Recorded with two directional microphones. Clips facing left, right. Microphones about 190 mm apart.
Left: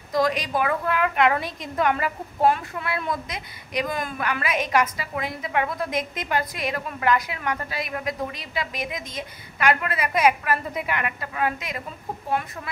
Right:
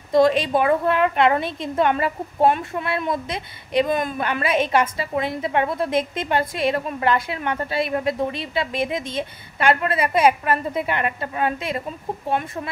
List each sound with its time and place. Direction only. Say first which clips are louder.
0.1 s a woman's voice: right 7 dB; 25° right (ahead or behind)